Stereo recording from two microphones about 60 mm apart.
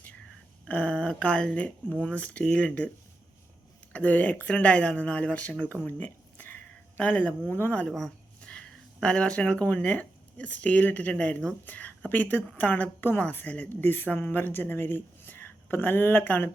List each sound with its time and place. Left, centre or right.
0.6 s speech: left
3.9 s speech: left
6.3 s a sound: left
7.9 s speech: centre
8.4 s speech: centre